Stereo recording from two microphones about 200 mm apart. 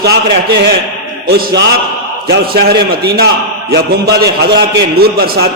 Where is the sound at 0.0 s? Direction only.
55° right (ahead or behind).